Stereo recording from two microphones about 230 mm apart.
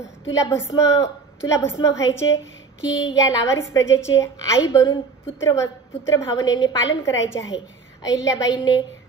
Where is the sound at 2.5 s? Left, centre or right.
Left.